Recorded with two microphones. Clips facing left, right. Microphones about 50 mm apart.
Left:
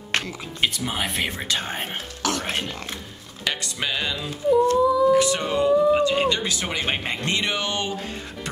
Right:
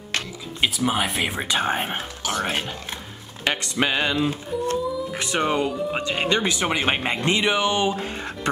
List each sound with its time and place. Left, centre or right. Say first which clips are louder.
0.6 s speech: right 3 dB; centre
1.3 s speech: right 5 dB; right
3.4 s speech: right 4 dB; right; by 7.9 s centre